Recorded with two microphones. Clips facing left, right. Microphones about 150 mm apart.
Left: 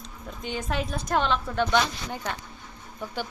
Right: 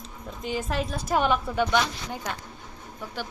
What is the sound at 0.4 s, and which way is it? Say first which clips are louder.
A woman's voice: right 1 dB; centre (ahead or behind).